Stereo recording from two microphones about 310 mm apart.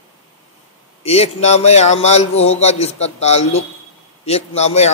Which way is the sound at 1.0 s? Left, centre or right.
Centre.